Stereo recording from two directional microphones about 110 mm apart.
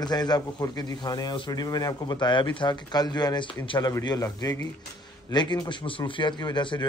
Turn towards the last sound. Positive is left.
turn(degrees=40)  # may be behind; listen again after turning